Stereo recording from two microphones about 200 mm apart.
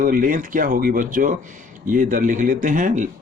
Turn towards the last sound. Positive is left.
turn(degrees=-40)  # may be behind; listen again after turning